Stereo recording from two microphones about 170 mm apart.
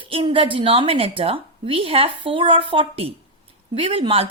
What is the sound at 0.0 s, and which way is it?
A woman's voice, 30° right (ahead or behind).